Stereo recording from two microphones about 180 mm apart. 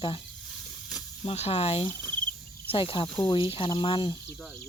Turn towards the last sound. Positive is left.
turn(degrees=25)  # may be behind; listen again after turning